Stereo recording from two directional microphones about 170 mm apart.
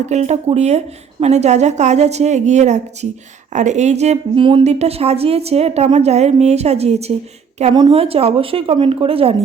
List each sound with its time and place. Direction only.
0.0 s a woman's voice: 40° right (ahead or behind)